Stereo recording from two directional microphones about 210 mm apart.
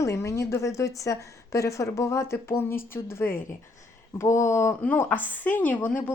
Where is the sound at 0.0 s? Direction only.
15° left (ahead or behind).